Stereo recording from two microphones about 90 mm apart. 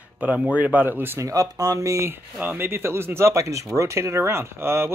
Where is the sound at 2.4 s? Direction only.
25° right (ahead or behind).